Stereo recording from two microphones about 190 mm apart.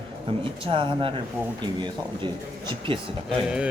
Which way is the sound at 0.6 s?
25° right (ahead or behind).